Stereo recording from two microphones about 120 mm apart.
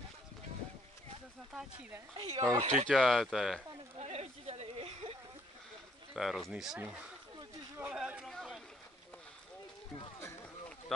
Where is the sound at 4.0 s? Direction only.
60° right (ahead or behind).